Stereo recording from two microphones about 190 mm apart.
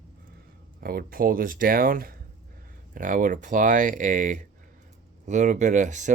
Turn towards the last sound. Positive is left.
turn(degrees=-40)  # may be behind; listen again after turning